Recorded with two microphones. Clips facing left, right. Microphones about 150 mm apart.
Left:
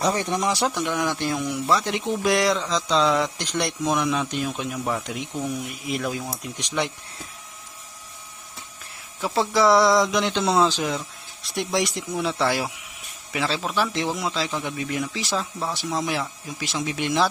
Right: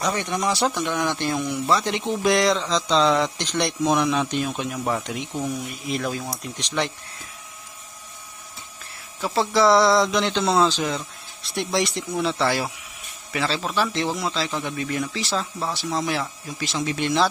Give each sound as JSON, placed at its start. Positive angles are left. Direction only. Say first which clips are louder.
{"t": 0.0, "sound": "speech", "louder": "left 2 dB", "side_deg": 30}
{"t": 0.4, "sound": "speech", "louder": "right 1 dB", "side_deg": 15}
{"t": 9.2, "sound": "speech", "louder": "right 1 dB", "side_deg": 15}